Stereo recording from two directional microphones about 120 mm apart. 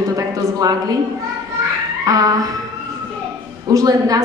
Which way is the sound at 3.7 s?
30° right (ahead or behind).